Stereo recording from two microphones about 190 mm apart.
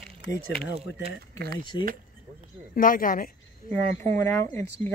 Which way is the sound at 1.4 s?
55° right (ahead or behind).